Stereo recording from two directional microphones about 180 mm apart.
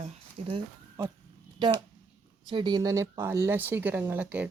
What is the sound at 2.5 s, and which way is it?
Speech, 25° right (ahead or behind).